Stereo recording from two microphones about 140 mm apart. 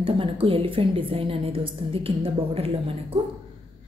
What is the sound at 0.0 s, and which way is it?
A woman's voice, 40° right (ahead or behind).